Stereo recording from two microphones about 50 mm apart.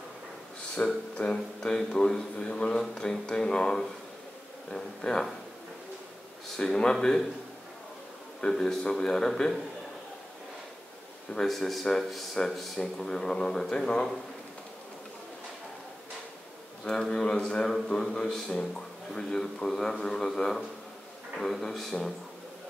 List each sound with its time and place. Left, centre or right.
0.8 s speech: left
1.1 s a man's voice: centre
6.5 s a man's voice: centre
8.4 s a man's voice: centre
11.3 s a man's voice: centre
16.8 s a man's voice: centre